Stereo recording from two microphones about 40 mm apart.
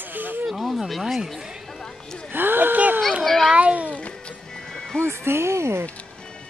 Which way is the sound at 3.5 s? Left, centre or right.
Right.